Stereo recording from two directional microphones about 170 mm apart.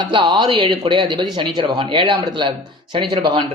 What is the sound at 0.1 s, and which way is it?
Speech, 25° right (ahead or behind).